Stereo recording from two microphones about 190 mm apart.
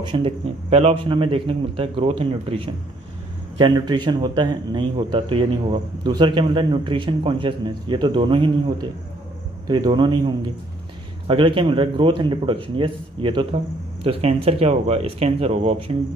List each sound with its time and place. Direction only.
0.0 s a man's voice: 25° right (ahead or behind)